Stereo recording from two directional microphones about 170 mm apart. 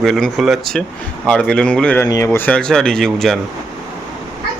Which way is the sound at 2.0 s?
20° left (ahead or behind).